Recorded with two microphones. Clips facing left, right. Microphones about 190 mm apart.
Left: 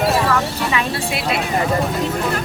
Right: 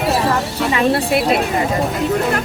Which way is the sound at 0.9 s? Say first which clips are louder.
Right 6 dB; 55° right (ahead or behind).